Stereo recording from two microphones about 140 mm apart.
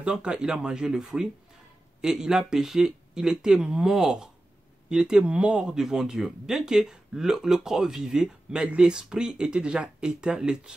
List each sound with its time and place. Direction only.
0.0 s speech: 5° right (ahead or behind)